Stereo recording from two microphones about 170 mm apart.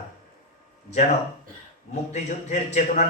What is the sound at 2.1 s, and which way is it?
Speech, 45° left (ahead or behind).